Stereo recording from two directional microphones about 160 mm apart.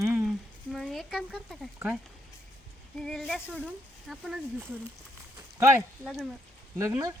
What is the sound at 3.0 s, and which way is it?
Speech, 5° left (ahead or behind).